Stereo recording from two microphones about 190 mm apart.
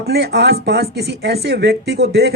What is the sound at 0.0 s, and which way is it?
Speech, 55° right (ahead or behind).